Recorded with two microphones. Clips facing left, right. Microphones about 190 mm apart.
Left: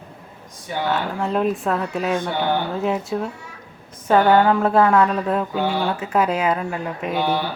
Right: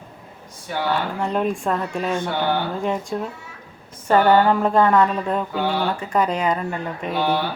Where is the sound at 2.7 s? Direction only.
5° left (ahead or behind).